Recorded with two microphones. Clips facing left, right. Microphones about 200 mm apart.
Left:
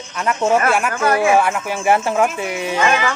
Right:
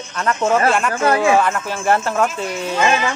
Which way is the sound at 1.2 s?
15° left (ahead or behind).